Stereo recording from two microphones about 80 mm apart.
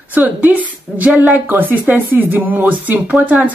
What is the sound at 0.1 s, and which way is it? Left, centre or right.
A woman's voice, right.